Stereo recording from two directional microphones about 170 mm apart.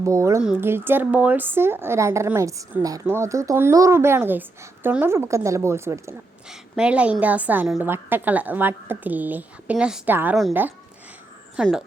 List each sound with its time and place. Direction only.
0.0 s speech: 15° right (ahead or behind)
6.5 s speech: 5° right (ahead or behind)
11.5 s speech: 5° right (ahead or behind)